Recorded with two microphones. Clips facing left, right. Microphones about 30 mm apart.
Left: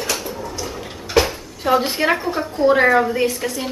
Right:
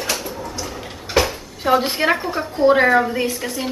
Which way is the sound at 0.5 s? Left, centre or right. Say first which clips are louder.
Left 1 dB; centre.